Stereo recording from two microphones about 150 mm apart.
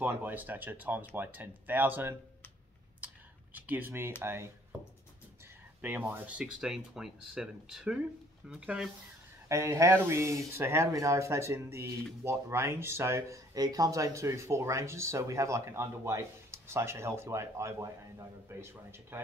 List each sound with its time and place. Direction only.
0.0 s speech: 10° right (ahead or behind)
3.5 s speech: 10° right (ahead or behind)
5.8 s speech: 10° right (ahead or behind)
9.5 s speech: 20° right (ahead or behind)